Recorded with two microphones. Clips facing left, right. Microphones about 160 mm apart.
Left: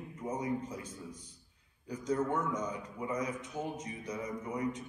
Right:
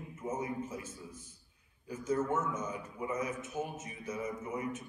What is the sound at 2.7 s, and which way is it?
Mantra, 25° right (ahead or behind).